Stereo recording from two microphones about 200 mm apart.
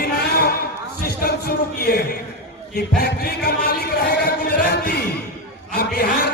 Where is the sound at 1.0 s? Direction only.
50° left (ahead or behind).